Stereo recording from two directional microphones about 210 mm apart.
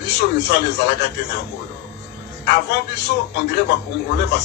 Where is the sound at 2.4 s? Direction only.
50° left (ahead or behind).